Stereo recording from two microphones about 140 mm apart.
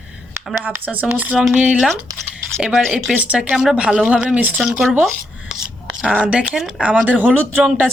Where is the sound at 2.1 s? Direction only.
25° right (ahead or behind).